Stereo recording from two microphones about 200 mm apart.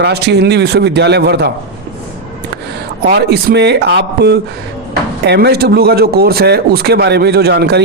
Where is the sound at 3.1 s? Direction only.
55° right (ahead or behind).